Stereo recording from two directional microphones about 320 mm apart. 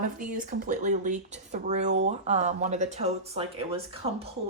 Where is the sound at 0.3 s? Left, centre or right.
Right.